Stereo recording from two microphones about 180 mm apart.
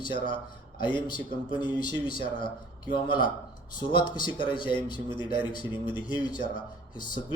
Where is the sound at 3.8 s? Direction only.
25° left (ahead or behind).